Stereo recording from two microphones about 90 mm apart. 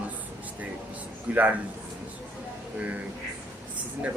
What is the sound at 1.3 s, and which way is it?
Speech, 20° right (ahead or behind).